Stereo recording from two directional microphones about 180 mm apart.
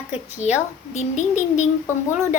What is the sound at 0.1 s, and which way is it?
A woman's voice, 40° left (ahead or behind).